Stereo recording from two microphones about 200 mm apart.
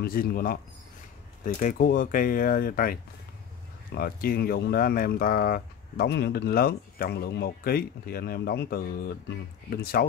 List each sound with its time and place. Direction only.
0.0 s speech: 45° left (ahead or behind)